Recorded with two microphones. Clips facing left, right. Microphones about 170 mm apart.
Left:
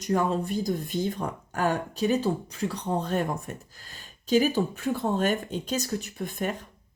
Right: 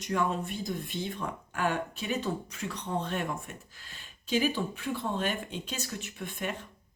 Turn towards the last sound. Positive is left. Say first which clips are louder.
# left 5 dB
turn(degrees=40)  # may be behind; listen again after turning